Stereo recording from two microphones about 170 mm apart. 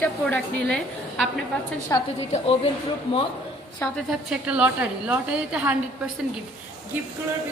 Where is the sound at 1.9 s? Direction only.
15° left (ahead or behind).